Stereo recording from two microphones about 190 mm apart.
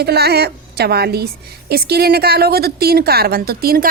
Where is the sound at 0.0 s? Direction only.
55° right (ahead or behind).